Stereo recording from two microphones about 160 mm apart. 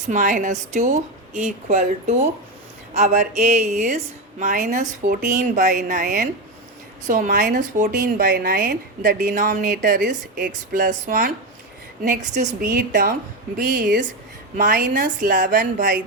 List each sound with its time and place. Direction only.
0.1 s a woman's voice: 55° right (ahead or behind)
14.5 s speech: 55° right (ahead or behind)